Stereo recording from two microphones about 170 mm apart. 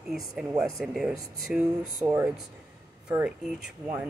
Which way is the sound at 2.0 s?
15° right (ahead or behind).